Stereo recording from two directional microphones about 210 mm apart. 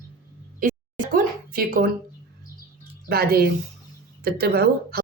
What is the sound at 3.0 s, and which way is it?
Speech, 45° right (ahead or behind).